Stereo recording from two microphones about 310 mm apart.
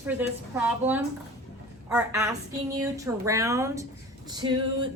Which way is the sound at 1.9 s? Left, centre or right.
Centre.